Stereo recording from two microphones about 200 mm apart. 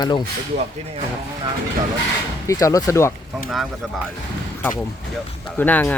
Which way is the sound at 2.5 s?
15° left (ahead or behind).